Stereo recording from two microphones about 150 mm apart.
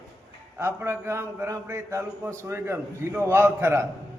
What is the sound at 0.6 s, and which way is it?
A man's voice, 15° right (ahead or behind).